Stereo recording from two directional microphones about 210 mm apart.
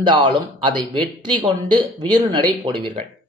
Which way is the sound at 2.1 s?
20° right (ahead or behind).